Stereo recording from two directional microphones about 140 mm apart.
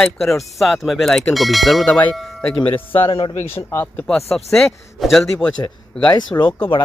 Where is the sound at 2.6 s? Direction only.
40° left (ahead or behind).